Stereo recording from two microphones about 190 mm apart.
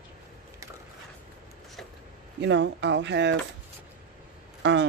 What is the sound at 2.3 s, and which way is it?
Speech, 70° right (ahead or behind).